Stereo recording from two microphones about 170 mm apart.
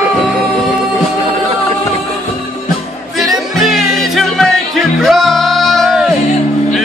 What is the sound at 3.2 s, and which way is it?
Music, centre (ahead or behind).